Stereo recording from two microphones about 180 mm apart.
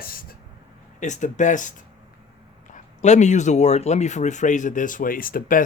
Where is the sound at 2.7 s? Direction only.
40° left (ahead or behind).